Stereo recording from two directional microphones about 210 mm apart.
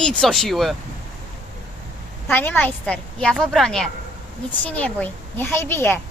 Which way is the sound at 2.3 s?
10° left (ahead or behind).